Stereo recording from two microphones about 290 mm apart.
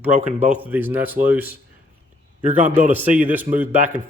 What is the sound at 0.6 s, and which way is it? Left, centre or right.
Speech, centre.